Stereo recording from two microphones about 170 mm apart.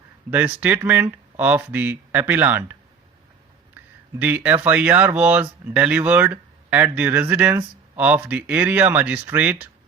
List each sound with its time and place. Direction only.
0.3 s speech: 10° right (ahead or behind)
4.2 s speech: 10° right (ahead or behind)